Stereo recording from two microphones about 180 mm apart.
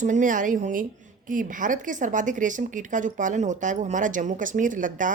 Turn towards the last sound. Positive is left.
turn(degrees=-45)  # may be behind; listen again after turning